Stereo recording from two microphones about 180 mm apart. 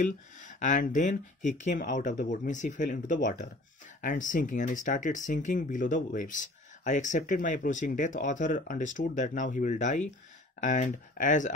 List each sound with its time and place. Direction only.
0.0 s speech: 45° left (ahead or behind)